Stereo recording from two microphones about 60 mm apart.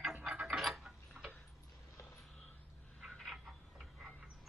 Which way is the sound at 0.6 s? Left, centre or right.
Centre.